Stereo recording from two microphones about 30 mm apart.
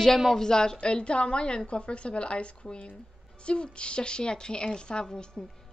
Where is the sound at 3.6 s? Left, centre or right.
Left.